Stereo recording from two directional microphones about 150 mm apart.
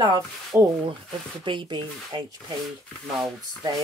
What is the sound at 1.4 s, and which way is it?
Speech, 30° right (ahead or behind).